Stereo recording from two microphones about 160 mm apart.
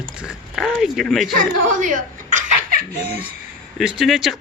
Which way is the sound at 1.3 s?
60° right (ahead or behind).